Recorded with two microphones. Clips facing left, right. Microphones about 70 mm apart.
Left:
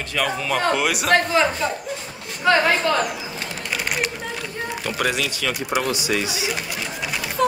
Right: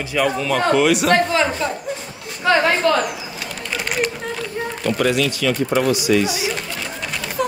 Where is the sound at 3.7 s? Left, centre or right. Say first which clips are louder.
Right 3 dB; centre.